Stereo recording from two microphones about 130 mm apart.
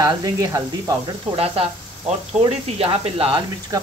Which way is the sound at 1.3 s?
50° right (ahead or behind).